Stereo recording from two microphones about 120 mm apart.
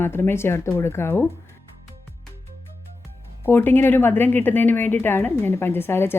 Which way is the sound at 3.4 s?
15° left (ahead or behind).